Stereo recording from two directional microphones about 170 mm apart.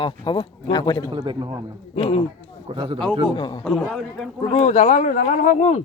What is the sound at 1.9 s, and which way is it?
Speech, 35° left (ahead or behind).